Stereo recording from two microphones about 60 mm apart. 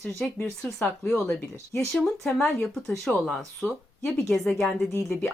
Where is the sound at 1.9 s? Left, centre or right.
Centre.